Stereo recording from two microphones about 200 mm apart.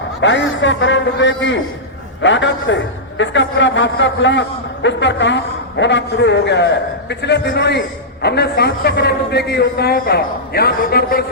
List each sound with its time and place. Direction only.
0.2 s a man's voice: 65° left (ahead or behind); by 11.3 s 50° left (ahead or behind)